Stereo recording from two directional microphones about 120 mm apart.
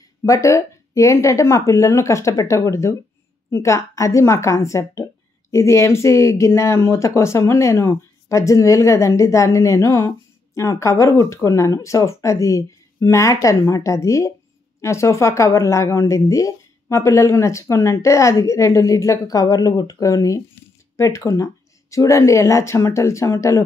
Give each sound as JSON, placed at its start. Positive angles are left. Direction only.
{"t": 0.2, "sound": "speech", "side_deg": 25}